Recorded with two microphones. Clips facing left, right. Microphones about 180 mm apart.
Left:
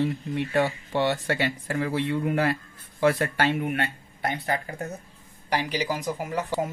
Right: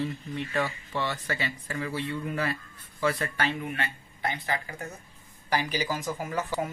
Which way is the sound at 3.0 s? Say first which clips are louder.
Left 6 dB; 60° left (ahead or behind).